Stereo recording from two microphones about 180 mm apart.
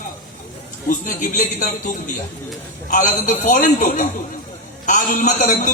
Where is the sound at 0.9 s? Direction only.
45° left (ahead or behind).